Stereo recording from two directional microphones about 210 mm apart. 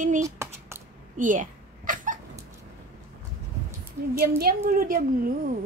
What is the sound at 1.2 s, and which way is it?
Cat, 40° right (ahead or behind).